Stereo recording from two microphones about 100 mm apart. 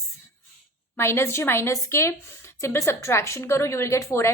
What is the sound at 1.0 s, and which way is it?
A woman's voice, 25° left (ahead or behind).